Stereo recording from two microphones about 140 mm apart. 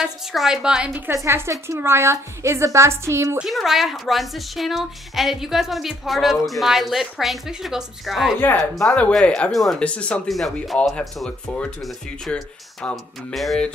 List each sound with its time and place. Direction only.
0.0 s a woman's voice: centre (ahead or behind); by 3.3 s 20° right (ahead or behind)
3.3 s speech: centre (ahead or behind)